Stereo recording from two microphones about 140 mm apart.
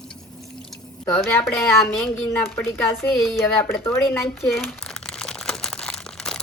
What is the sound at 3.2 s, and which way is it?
Speech, centre (ahead or behind).